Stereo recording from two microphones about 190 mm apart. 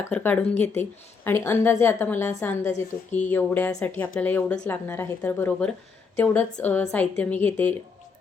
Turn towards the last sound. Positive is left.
turn(degrees=10)  # may be behind; listen again after turning